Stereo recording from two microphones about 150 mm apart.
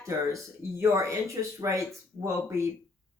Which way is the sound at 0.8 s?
20° right (ahead or behind).